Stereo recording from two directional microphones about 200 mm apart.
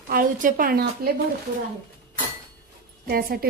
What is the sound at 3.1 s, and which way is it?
Speech, 45° right (ahead or behind).